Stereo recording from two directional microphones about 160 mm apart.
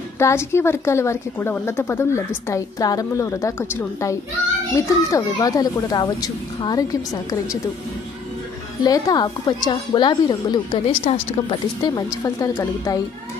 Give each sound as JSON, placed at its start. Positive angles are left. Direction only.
{"t": 0.2, "sound": "a woman's voice", "side_deg": 15}
{"t": 8.8, "sound": "speech", "side_deg": 25}